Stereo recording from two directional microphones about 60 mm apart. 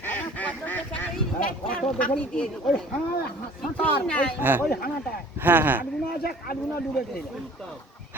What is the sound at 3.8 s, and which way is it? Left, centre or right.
Speech, left.